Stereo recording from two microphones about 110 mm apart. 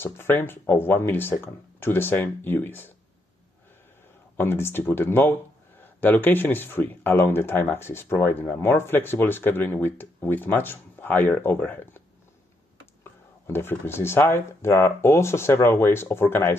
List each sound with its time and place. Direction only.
0.0 s speech: 20° left (ahead or behind)
4.4 s speech: 20° left (ahead or behind)
13.0 s speech: 20° left (ahead or behind)